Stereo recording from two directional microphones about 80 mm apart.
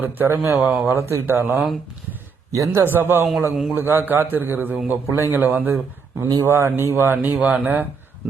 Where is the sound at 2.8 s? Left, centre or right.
Right.